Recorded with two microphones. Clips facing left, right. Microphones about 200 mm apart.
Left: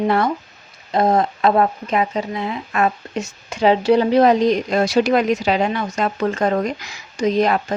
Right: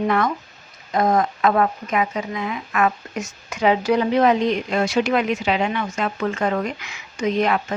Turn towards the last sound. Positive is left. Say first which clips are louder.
# left 3 dB
turn(degrees=35)  # may be behind; listen again after turning